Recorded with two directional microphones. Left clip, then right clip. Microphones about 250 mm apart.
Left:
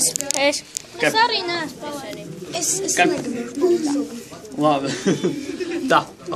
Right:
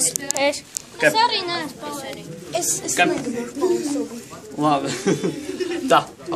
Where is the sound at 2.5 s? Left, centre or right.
Centre.